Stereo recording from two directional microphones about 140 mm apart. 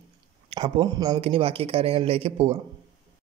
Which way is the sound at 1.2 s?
45° right (ahead or behind).